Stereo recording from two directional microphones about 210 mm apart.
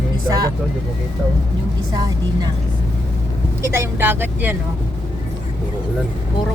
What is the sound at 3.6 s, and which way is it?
Speech, 10° right (ahead or behind).